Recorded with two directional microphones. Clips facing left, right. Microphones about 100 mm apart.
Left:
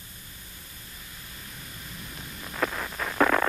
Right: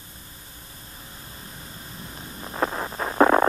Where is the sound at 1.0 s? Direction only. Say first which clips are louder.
Right 4 dB; 30° right (ahead or behind).